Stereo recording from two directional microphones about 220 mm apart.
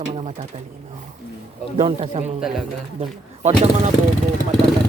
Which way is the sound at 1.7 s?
30° right (ahead or behind).